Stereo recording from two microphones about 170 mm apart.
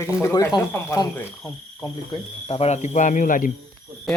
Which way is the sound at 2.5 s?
35° left (ahead or behind).